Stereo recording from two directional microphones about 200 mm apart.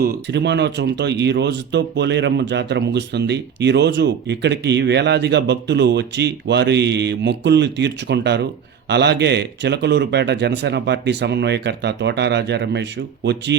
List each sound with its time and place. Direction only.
0.0 s speech: 55° right (ahead or behind)